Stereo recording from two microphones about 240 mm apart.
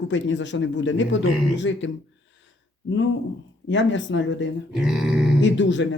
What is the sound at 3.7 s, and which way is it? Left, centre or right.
Speech, left.